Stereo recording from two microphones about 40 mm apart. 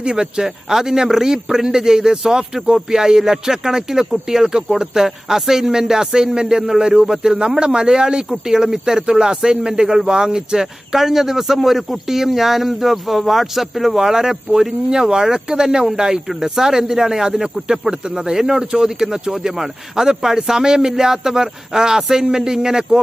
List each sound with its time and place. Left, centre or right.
0.0 s a man's voice: centre